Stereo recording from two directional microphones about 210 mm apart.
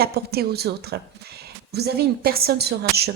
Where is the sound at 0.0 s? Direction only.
50° right (ahead or behind).